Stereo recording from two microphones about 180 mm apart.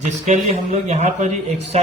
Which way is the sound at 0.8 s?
40° right (ahead or behind).